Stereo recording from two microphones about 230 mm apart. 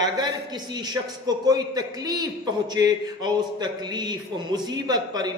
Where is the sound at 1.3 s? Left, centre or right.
Centre.